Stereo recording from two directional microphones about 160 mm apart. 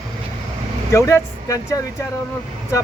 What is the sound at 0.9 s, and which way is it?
Speech, 20° left (ahead or behind).